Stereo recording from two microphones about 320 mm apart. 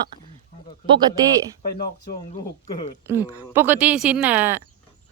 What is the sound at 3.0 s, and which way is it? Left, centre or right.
Speech, centre.